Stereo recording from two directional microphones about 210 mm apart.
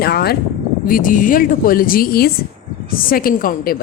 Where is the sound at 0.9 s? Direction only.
40° left (ahead or behind).